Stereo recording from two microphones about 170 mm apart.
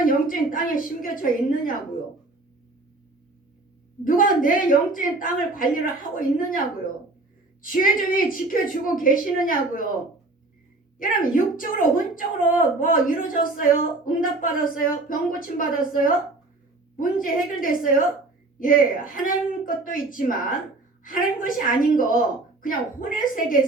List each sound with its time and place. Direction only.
0.0 s a woman's voice: 55° left (ahead or behind)
4.0 s a woman's voice: 55° left (ahead or behind)
7.6 s a woman's voice: 55° left (ahead or behind)
11.0 s a woman's voice: 55° left (ahead or behind)